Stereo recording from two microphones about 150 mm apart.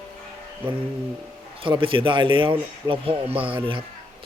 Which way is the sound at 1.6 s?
35° right (ahead or behind).